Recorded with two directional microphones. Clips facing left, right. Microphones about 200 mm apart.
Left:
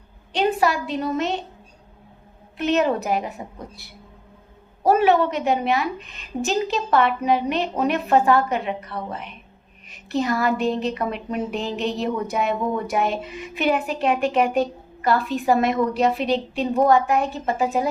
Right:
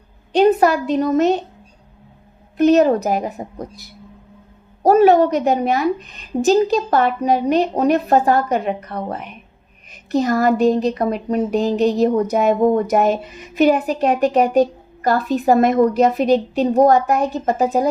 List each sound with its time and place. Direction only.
0.3 s a woman's voice: 45° right (ahead or behind)
2.6 s speech: 40° right (ahead or behind)